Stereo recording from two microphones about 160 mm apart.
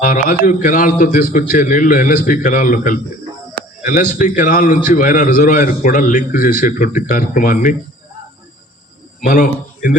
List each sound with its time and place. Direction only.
0.0 s a man's voice: 55° left (ahead or behind)
9.2 s a man's voice: 55° left (ahead or behind)